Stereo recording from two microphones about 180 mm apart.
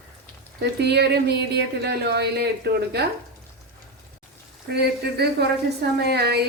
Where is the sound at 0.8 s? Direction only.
65° right (ahead or behind).